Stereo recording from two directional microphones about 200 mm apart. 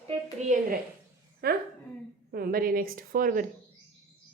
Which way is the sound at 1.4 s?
50° right (ahead or behind).